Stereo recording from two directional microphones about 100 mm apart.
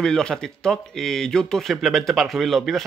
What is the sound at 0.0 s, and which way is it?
Speech, 5° left (ahead or behind).